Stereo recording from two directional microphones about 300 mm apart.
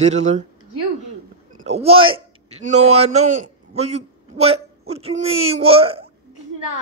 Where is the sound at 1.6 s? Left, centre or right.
Right.